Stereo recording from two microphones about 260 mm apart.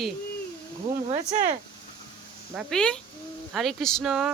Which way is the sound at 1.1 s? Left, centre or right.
Right.